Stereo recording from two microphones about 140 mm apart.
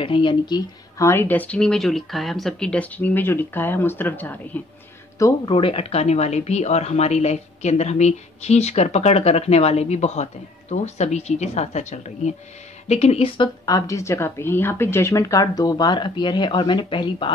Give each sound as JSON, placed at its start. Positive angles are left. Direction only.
{"t": 0.0, "sound": "speech", "side_deg": 40}
{"t": 0.9, "sound": "speech", "side_deg": 20}
{"t": 5.5, "sound": "speech", "side_deg": 40}
{"t": 13.7, "sound": "a woman's voice", "side_deg": 25}